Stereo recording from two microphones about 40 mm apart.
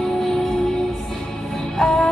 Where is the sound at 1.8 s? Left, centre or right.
Centre.